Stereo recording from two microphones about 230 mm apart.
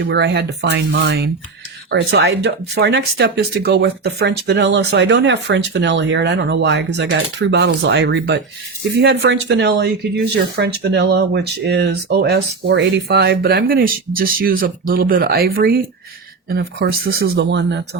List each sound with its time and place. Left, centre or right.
0.1 s speech: right